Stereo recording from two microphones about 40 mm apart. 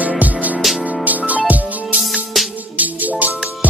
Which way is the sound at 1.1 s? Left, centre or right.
Right.